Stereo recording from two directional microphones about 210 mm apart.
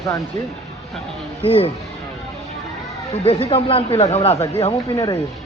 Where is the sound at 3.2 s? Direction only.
25° left (ahead or behind).